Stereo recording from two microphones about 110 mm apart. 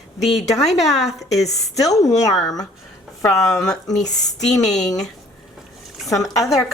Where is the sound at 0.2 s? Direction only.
Centre (ahead or behind).